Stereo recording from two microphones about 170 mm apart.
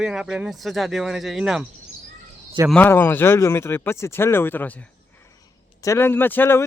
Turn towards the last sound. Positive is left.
turn(degrees=10)  # may be behind; listen again after turning